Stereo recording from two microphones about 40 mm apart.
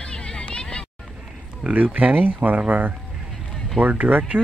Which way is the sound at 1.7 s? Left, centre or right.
Right.